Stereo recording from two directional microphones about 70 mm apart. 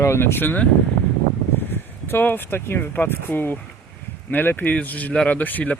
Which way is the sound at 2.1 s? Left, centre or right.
Left.